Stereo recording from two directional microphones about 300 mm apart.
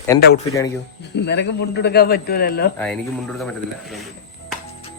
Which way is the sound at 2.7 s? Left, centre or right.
Centre.